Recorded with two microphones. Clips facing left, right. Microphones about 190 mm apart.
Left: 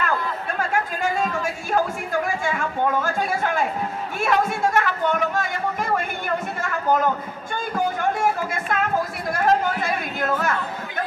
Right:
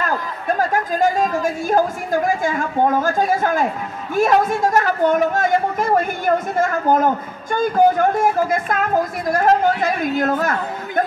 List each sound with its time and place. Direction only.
0.0 s speech: 40° right (ahead or behind)